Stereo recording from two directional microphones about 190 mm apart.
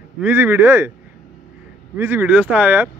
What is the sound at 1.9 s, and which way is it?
Speech, 10° right (ahead or behind).